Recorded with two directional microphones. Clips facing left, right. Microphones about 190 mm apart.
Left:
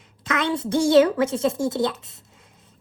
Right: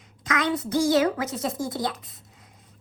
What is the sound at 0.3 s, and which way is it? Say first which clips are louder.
A child's voice: left 2 dB; 25° left (ahead or behind).